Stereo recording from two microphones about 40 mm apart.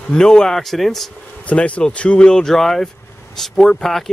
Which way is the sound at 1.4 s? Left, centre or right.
Left.